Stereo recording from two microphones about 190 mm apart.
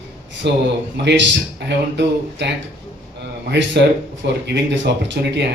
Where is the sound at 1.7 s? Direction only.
65° right (ahead or behind).